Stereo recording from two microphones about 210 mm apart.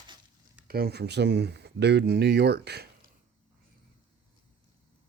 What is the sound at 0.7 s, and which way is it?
Speech, 50° right (ahead or behind).